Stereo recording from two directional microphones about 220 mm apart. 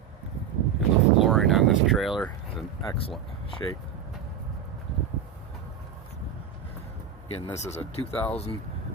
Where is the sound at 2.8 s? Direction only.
25° left (ahead or behind).